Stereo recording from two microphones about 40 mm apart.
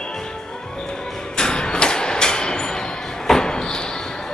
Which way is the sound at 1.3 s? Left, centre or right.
Centre.